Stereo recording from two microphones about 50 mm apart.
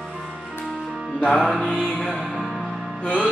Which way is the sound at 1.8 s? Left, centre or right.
Centre.